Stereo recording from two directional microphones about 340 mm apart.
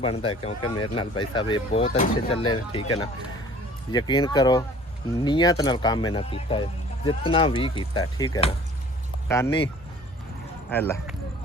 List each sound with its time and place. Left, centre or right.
0.0 s speech: centre
3.9 s speech: centre
10.7 s speech: centre